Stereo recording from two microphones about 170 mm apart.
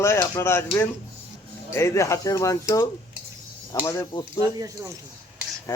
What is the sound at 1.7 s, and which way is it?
Speech, 15° left (ahead or behind).